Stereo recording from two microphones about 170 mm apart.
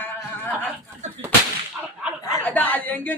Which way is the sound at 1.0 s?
40° right (ahead or behind).